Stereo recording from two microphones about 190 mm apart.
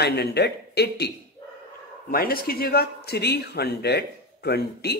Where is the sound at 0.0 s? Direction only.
60° left (ahead or behind).